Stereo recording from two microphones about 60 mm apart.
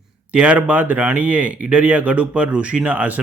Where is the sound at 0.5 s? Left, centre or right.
Right.